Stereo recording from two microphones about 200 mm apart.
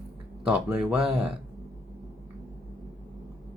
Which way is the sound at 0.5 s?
5° right (ahead or behind).